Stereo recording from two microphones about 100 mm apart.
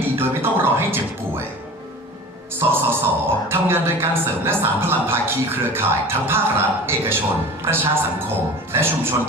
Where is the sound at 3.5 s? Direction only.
25° right (ahead or behind).